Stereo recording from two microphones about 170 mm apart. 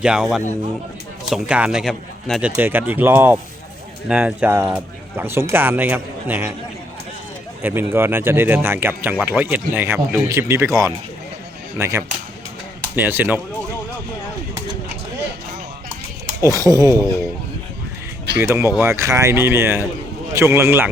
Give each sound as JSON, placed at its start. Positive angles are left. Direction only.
{"t": 0.0, "sound": "speech", "side_deg": -5}
{"t": 2.6, "sound": "speech", "side_deg": -10}
{"t": 7.6, "sound": "speech", "side_deg": -15}
{"t": 16.4, "sound": "speech", "side_deg": -20}
{"t": 18.4, "sound": "speech", "side_deg": -15}